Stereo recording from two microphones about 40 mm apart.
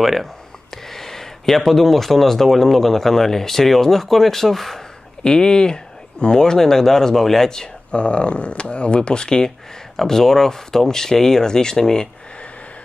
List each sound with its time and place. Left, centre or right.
0.0 s speech: centre
0.8 s speech: centre
5.2 s speech: centre
7.9 s speech: left